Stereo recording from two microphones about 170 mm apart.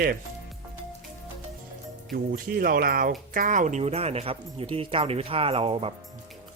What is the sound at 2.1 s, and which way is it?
Speech, 60° right (ahead or behind).